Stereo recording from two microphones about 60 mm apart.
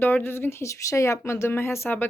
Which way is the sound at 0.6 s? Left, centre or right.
Left.